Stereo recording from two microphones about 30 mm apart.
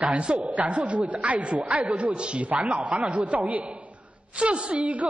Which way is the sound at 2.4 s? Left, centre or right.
Right.